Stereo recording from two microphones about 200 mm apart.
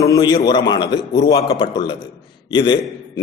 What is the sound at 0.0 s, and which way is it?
A man's voice, 20° left (ahead or behind).